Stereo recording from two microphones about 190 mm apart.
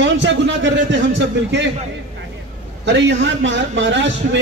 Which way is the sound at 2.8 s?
70° right (ahead or behind).